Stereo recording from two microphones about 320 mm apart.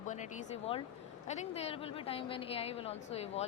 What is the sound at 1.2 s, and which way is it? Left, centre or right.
Speech, centre.